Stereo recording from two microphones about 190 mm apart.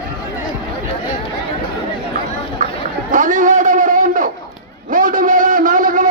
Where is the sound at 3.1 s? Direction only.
40° right (ahead or behind).